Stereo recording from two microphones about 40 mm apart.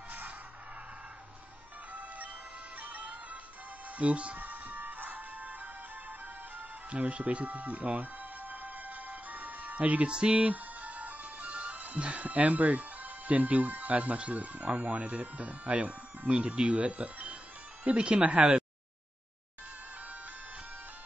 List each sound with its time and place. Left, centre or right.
2.8 s music: right
4.0 s speech: right
4.4 s music: right
6.9 s music: right
10.0 s speech: right
10.4 s music: right
14.8 s speech: right